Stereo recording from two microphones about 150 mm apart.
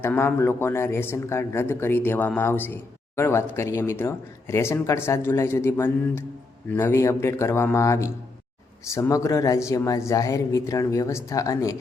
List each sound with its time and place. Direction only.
0.0 s speech: 15° left (ahead or behind)